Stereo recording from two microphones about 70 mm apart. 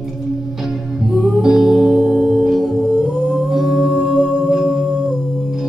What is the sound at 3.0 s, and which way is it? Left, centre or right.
Humming, centre.